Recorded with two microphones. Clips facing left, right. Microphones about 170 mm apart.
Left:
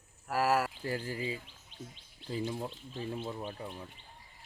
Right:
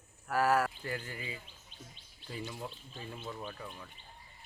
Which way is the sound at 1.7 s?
80° left.